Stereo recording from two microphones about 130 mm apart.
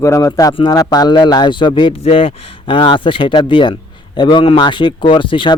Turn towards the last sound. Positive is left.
turn(degrees=40)  # may be behind; listen again after turning